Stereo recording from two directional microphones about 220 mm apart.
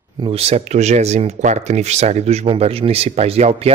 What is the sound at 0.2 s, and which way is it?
Speech, 25° right (ahead or behind).